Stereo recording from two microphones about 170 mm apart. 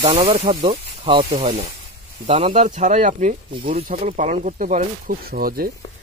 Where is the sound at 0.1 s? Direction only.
30° right (ahead or behind).